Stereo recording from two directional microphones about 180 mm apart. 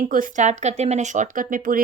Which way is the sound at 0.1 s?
45° right (ahead or behind).